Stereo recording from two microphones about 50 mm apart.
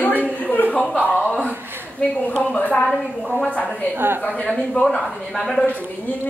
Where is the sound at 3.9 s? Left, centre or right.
Right.